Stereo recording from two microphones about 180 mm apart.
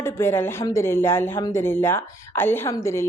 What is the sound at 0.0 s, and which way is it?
Speech, 15° left (ahead or behind).